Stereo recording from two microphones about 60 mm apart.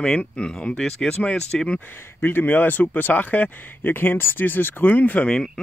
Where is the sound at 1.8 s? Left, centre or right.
Left.